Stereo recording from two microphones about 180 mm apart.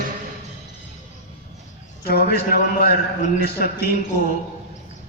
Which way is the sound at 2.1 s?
60° left (ahead or behind).